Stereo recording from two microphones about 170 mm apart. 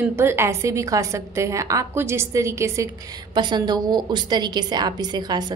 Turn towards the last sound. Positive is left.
turn(degrees=-25)  # may be behind; listen again after turning